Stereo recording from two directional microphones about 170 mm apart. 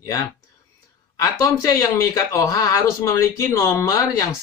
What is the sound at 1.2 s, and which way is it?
Speech, 20° left (ahead or behind).